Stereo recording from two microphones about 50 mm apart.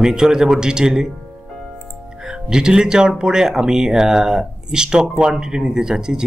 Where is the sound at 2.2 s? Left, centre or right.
Centre.